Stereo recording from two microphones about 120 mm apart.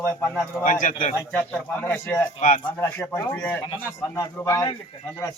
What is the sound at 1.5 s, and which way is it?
A man's voice, 15° left (ahead or behind).